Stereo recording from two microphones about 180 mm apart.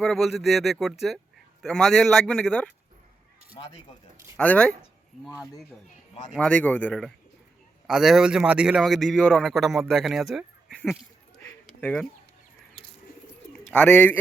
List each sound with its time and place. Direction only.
0.0 s a man's voice: centre (ahead or behind)
3.6 s speech: 30° left (ahead or behind)
4.4 s speech: 5° left (ahead or behind)
6.3 s a man's voice: 5° left (ahead or behind)
13.5 s speech: 5° left (ahead or behind)